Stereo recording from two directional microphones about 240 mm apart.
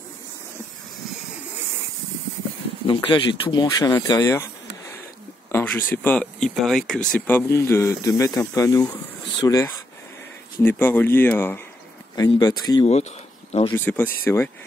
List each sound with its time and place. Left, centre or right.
2.9 s speech: centre
5.5 s speech: centre
10.6 s speech: centre
13.7 s speech: centre